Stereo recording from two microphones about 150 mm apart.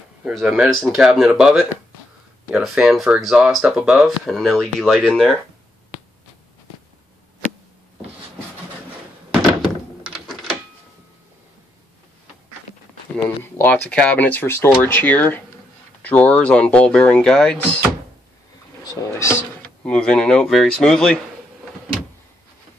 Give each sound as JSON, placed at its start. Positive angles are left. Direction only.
{"t": 0.2, "sound": "speech", "side_deg": -5}
{"t": 9.3, "sound": "thunk", "side_deg": 5}
{"t": 10.1, "sound": "a sound", "side_deg": 5}
{"t": 13.4, "sound": "speech", "side_deg": 10}
{"t": 18.9, "sound": "speech", "side_deg": 20}
{"t": 19.8, "sound": "speech", "side_deg": 5}